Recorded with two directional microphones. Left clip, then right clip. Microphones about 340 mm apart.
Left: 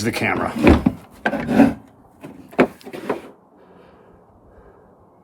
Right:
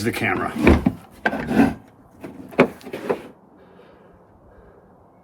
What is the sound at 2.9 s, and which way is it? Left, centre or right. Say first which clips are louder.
Power windows: right 1 dB; left.